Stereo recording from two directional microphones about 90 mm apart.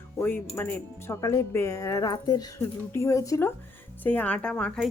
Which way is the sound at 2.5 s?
30° left (ahead or behind).